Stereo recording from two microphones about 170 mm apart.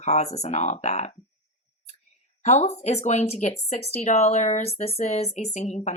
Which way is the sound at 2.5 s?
40° left (ahead or behind).